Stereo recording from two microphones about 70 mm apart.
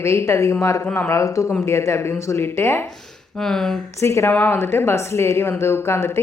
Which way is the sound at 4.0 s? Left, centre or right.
Left.